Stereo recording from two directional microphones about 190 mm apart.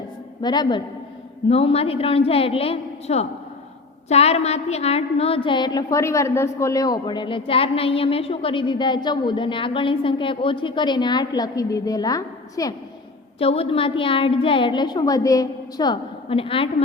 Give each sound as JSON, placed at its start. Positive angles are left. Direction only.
{"t": 0.4, "sound": "a woman's voice", "side_deg": 20}
{"t": 13.4, "sound": "a woman's voice", "side_deg": 30}